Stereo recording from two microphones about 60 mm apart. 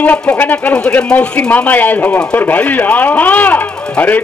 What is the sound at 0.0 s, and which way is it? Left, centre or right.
A man's voice, left.